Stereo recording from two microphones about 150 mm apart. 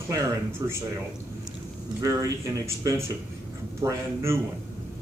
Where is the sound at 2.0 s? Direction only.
20° right (ahead or behind).